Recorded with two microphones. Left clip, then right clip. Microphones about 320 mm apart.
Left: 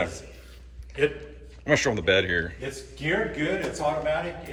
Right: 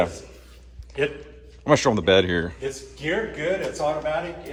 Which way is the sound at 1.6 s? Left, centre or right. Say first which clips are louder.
Right 4 dB; centre.